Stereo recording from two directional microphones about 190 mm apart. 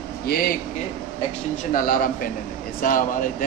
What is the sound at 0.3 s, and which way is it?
Speech, 55° left (ahead or behind).